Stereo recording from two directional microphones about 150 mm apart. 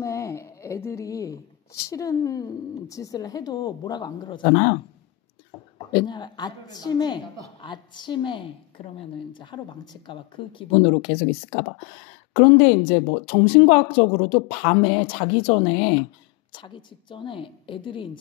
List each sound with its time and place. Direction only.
0.0 s a woman's voice: 20° left (ahead or behind)
5.9 s a woman's voice: 30° left (ahead or behind)
12.4 s speech: 40° left (ahead or behind)